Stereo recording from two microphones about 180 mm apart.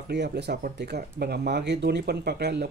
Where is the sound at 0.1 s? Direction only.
65° right (ahead or behind).